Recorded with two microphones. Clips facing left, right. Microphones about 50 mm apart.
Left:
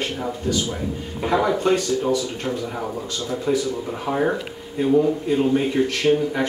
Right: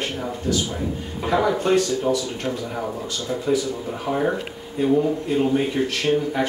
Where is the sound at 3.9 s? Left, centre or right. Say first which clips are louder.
Even; centre.